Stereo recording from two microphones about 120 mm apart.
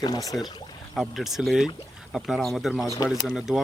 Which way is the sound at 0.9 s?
Centre (ahead or behind).